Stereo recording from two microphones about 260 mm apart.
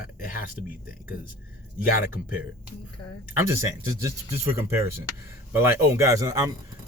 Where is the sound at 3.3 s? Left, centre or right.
Centre.